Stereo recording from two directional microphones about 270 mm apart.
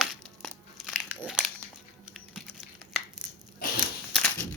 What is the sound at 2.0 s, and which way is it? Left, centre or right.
Typing, centre.